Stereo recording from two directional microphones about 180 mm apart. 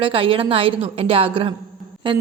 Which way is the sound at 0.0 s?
30° right (ahead or behind).